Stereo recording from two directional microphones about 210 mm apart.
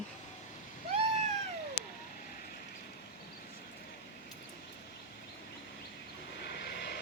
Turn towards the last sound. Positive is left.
turn(degrees=50)  # may be behind; listen again after turning